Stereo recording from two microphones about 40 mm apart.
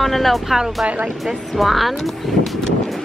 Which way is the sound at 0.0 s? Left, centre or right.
Centre.